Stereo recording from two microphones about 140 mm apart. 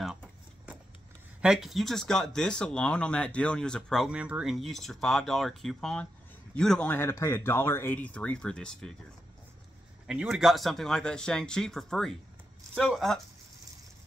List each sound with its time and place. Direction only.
0.0 s a sound: 5° right (ahead or behind)
1.4 s speech: 5° right (ahead or behind)
10.0 s speech: 5° right (ahead or behind)